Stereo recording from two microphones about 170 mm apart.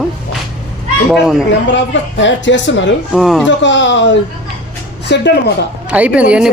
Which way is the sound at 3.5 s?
90° left.